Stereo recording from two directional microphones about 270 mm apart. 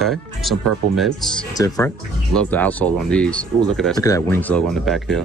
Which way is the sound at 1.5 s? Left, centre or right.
Centre.